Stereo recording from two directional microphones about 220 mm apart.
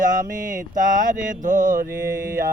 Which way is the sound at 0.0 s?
35° right (ahead or behind).